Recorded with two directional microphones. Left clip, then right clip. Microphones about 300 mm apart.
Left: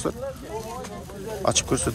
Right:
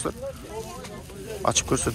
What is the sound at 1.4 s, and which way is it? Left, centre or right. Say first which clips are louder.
Speech: even; centre.